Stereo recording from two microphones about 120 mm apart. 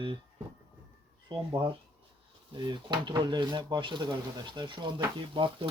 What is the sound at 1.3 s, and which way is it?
Speech, 45° right (ahead or behind).